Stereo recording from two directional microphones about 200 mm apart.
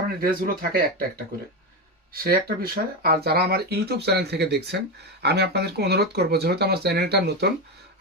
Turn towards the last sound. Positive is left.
turn(degrees=-55)  # may be behind; listen again after turning